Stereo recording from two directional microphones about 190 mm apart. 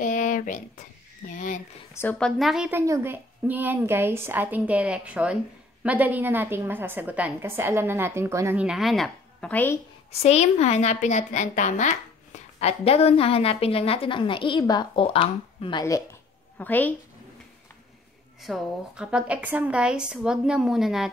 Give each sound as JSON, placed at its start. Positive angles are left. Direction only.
{"t": 0.0, "sound": "a sound", "side_deg": 40}
{"t": 1.3, "sound": "a woman's voice", "side_deg": 40}
{"t": 2.0, "sound": "a woman's voice", "side_deg": 5}
{"t": 2.8, "sound": "a woman's voice", "side_deg": -15}
{"t": 10.2, "sound": "a woman's voice", "side_deg": 35}
{"t": 18.4, "sound": "a woman's voice", "side_deg": 0}